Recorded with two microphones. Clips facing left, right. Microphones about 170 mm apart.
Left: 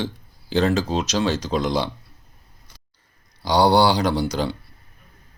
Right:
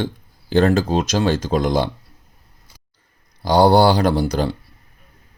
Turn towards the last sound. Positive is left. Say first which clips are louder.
# right 4 dB
turn(degrees=-45)  # may be behind; listen again after turning